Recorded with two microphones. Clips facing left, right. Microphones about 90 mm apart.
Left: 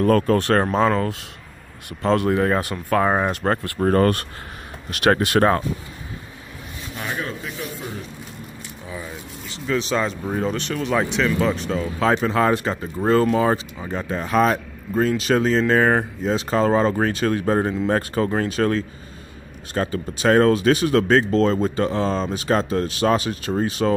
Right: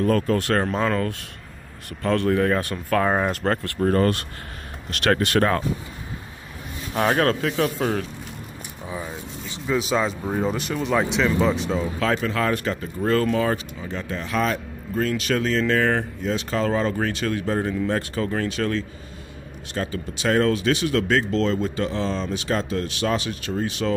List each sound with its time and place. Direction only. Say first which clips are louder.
0.0 s speech: left 3 dB; 45° left (ahead or behind)
0.7 s speech: left 4 dB; 20° left (ahead or behind)
2.6 s speech: left 2 dB; 10° left (ahead or behind)
3.8 s speech: left 2 dB; 45° left (ahead or behind)
4.9 s speech: left 2 dB; 15° left (ahead or behind)
6.9 s speech: right 9 dB; 60° right (ahead or behind); by 8.0 s 90° right
8.8 s speech: right 2 dB; 20° right (ahead or behind)
9.7 s speech: even; 5° right (ahead or behind)
12.0 s speech: left 6 dB; 30° left (ahead or behind)